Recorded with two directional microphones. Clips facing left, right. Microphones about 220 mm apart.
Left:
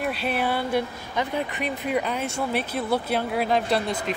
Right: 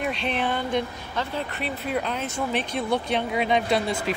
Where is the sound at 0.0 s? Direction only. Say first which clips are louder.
Left 1 dB; 5° left (ahead or behind).